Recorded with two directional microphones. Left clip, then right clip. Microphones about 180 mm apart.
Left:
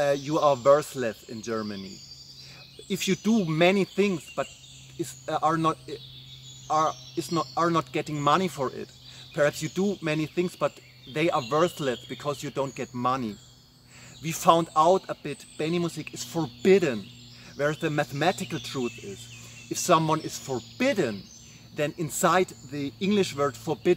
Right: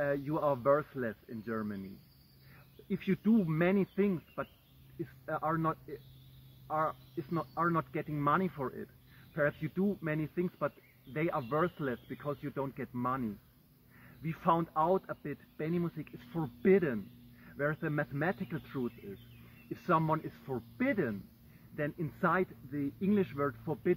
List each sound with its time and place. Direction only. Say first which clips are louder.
0.0 s speech: left 9 dB; 40° left (ahead or behind)
2.9 s speech: left 6 dB; 40° left (ahead or behind)